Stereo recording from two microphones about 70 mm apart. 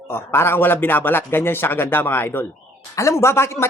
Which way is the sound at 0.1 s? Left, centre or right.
Left.